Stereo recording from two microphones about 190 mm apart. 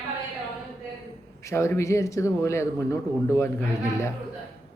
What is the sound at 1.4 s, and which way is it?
Speech, 15° left (ahead or behind).